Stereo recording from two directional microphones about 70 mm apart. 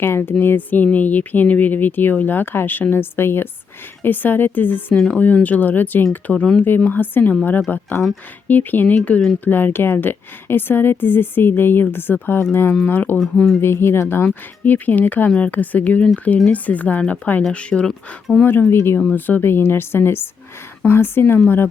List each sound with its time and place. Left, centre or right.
0.0 s speech: left
4.9 s speech: centre
13.1 s speech: centre
13.6 s speech: left; by 17.9 s centre
18.3 s speech: left